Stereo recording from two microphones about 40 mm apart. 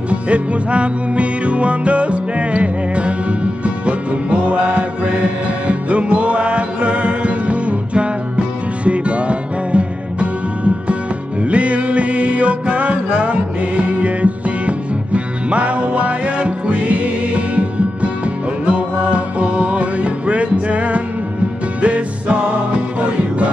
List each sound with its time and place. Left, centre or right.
0.1 s music: right